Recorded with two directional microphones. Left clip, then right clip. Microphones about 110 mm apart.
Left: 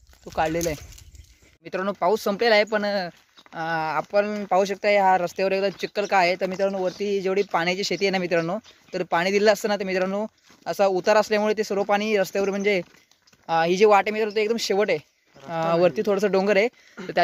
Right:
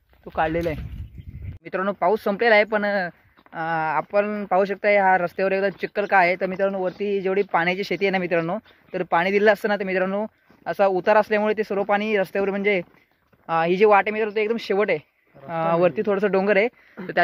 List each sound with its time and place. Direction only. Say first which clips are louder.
0.5 s speech: right 1 dB; 10° left (ahead or behind)
1.6 s speech: right 2 dB; 25° left (ahead or behind)